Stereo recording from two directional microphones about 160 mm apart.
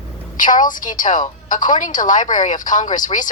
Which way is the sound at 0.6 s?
55° left (ahead or behind).